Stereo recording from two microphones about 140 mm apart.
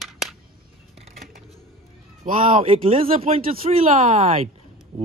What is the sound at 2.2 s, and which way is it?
Speech, 75° right (ahead or behind).